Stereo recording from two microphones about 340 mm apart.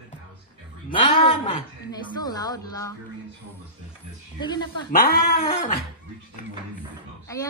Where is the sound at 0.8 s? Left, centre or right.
Centre.